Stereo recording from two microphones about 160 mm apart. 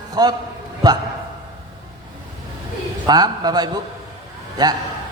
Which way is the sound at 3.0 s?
25° right (ahead or behind).